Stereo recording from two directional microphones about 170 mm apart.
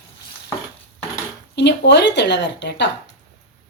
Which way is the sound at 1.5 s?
90° left.